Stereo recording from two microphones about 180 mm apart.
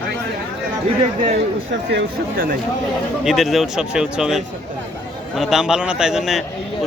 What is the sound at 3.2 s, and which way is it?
Speech, centre (ahead or behind).